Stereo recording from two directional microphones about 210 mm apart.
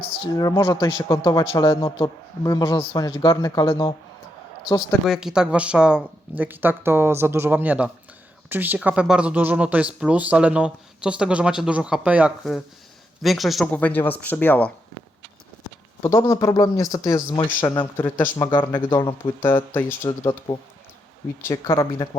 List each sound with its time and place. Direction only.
0.2 s speech: 15° left (ahead or behind)
5.0 s speech: centre (ahead or behind)
16.0 s speech: 15° left (ahead or behind)
18.3 s speech: 20° left (ahead or behind)
19.7 s speech: 10° left (ahead or behind)
21.8 s speech: 15° left (ahead or behind)